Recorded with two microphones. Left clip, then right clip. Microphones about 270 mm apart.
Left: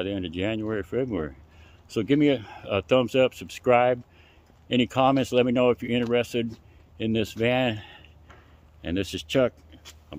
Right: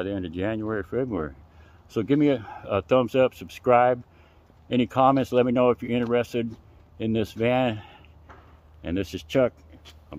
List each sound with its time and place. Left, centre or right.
0.0 s speech: centre